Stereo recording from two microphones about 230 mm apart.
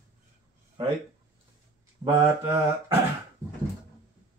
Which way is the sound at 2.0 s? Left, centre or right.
Centre.